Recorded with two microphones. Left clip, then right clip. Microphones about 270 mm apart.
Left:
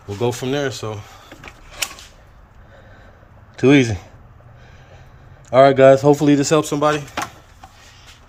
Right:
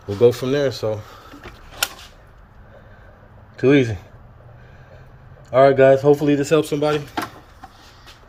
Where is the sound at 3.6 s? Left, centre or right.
Centre.